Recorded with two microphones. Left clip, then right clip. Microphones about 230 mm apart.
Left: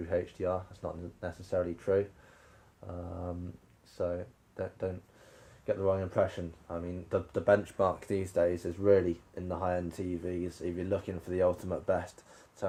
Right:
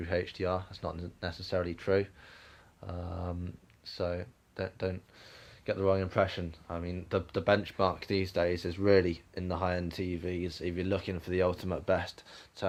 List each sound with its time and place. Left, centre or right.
0.0 s speech: right
2.8 s a sound: right
3.9 s speech: right